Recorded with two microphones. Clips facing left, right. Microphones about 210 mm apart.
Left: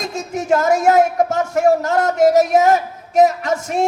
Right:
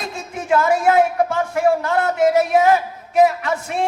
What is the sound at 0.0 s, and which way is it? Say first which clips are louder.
A man's voice: left 5 dB; 45° left (ahead or behind).